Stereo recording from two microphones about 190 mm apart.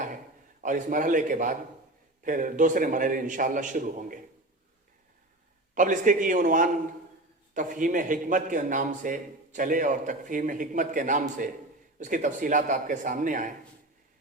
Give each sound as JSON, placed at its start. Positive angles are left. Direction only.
{"t": 0.6, "sound": "a man's voice", "side_deg": -40}
{"t": 5.7, "sound": "a man's voice", "side_deg": -40}